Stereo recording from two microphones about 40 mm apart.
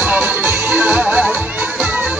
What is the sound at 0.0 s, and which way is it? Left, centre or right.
Music, right.